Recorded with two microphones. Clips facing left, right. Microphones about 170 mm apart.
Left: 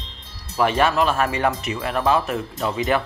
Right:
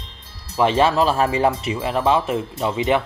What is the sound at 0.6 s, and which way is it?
Speech, 25° right (ahead or behind).